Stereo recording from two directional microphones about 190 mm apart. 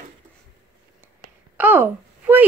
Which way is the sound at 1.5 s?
10° right (ahead or behind).